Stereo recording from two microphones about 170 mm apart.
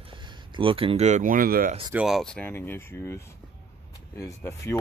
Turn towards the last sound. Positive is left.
turn(degrees=15)  # may be behind; listen again after turning